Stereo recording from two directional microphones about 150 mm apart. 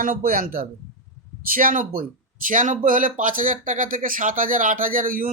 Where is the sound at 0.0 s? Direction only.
70° right (ahead or behind).